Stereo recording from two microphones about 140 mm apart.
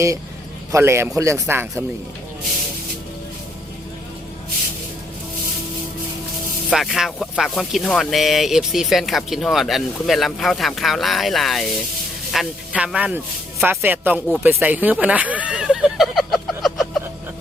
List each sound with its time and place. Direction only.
0.7 s speech: 20° right (ahead or behind)
6.7 s speech: centre (ahead or behind)
14.6 s a sound: 10° right (ahead or behind)